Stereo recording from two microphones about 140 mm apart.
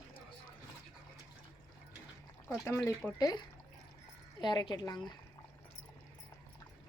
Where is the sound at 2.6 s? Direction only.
20° left (ahead or behind).